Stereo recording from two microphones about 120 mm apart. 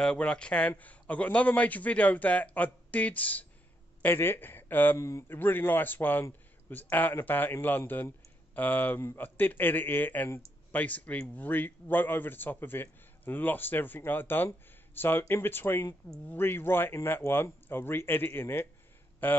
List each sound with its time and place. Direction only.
0.0 s a man's voice: 10° left (ahead or behind)